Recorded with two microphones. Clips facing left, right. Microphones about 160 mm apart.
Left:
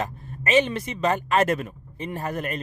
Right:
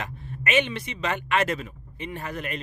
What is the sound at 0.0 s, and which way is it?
A man's voice, 40° left (ahead or behind).